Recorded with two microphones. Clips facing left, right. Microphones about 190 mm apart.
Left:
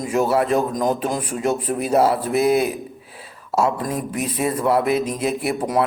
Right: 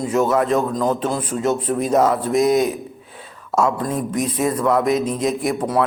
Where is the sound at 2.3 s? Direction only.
5° left (ahead or behind).